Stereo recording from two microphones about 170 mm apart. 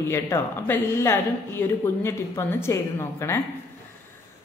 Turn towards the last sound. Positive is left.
turn(degrees=15)  # may be behind; listen again after turning